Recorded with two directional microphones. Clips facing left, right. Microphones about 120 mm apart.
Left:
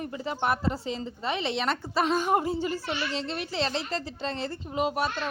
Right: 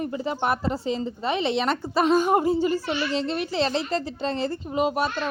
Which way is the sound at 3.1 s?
45° right (ahead or behind).